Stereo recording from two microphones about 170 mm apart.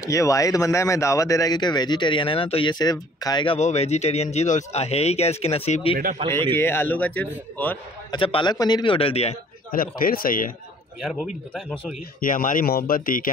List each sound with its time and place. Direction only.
0.0 s speech: 20° left (ahead or behind)
3.5 s speech: 40° left (ahead or behind)
6.5 s a man's voice: 15° left (ahead or behind)
8.1 s speech: 30° left (ahead or behind)
9.7 s speech: 55° left (ahead or behind)
12.2 s speech: 55° left (ahead or behind)